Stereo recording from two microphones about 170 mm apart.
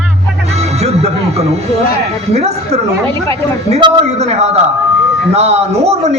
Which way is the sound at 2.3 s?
40° right (ahead or behind).